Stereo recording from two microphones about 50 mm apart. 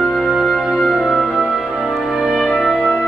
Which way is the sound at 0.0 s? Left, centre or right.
Centre.